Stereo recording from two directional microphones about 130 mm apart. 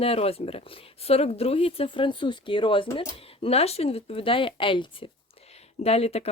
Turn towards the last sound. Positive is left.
turn(degrees=50)  # may be behind; listen again after turning